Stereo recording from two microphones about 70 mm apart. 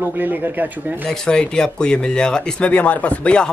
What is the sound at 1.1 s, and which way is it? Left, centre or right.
Speech, centre.